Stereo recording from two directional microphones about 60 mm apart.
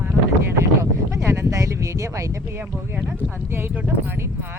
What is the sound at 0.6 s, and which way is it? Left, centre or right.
Speech, right.